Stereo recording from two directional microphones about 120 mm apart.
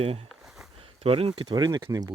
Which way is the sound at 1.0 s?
50° right (ahead or behind).